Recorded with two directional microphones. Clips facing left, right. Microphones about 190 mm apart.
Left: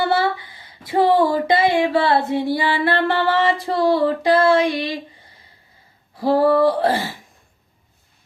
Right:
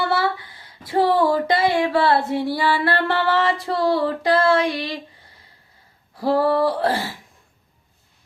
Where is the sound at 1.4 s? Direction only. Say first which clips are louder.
Left 2 dB; 20° left (ahead or behind).